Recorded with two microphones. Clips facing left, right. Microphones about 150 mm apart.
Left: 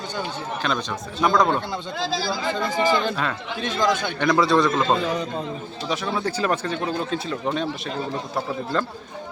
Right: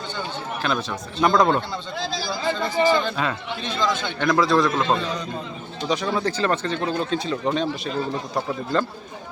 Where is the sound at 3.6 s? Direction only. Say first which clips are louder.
Left 3 dB; 45° left (ahead or behind).